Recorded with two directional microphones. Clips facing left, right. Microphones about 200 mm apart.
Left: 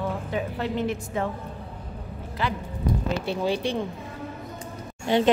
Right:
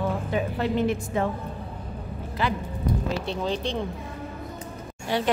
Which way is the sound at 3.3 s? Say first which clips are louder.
Left 5 dB; 10° left (ahead or behind).